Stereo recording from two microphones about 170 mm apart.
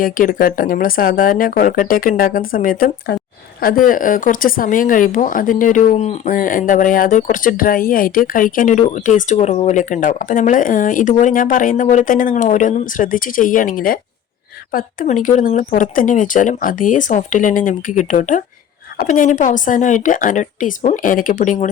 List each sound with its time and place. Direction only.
0.0 s speech: 55° left (ahead or behind)